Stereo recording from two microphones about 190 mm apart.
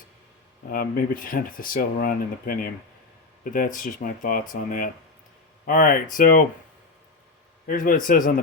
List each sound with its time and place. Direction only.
0.7 s speech: 50° left (ahead or behind)
5.6 s speech: 45° left (ahead or behind)
7.7 s speech: 45° left (ahead or behind)